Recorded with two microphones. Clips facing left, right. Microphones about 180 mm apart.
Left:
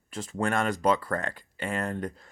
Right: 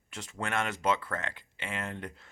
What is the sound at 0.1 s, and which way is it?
Speech, 45° left (ahead or behind).